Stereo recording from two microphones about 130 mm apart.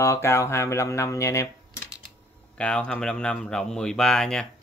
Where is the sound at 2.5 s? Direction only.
10° left (ahead or behind).